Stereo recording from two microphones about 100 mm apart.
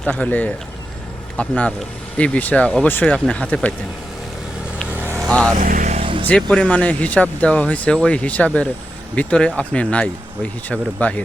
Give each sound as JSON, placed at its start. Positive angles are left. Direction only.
{"t": 0.0, "sound": "speech", "side_deg": 15}
{"t": 4.9, "sound": "vehicle", "side_deg": -20}
{"t": 5.3, "sound": "speech", "side_deg": 10}
{"t": 5.9, "sound": "vehicle", "side_deg": -65}
{"t": 6.2, "sound": "speech", "side_deg": 10}